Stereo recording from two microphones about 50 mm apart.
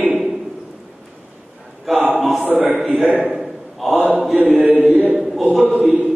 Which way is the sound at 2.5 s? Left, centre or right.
Right.